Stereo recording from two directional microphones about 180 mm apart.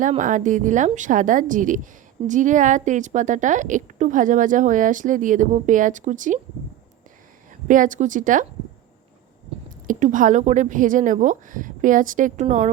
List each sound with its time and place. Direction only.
0.0 s a woman's voice: 45° right (ahead or behind)
7.7 s a woman's voice: 45° right (ahead or behind)
9.8 s a woman's voice: 45° right (ahead or behind)